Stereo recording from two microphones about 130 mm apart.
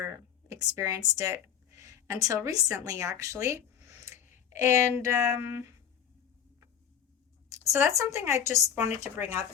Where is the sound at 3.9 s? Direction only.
20° right (ahead or behind).